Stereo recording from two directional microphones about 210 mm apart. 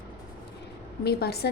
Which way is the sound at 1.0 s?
50° left (ahead or behind).